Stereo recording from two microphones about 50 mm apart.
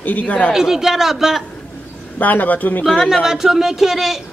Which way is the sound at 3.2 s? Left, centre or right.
Centre.